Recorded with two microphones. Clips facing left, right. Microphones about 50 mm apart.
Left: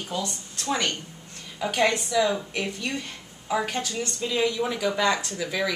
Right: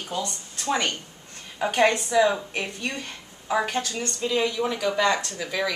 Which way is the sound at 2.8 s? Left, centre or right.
Centre.